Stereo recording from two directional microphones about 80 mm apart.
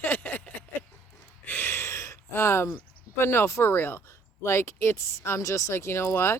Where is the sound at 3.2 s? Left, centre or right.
Left.